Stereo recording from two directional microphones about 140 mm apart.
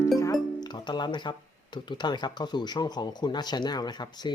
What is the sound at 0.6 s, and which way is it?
Speech, 30° left (ahead or behind).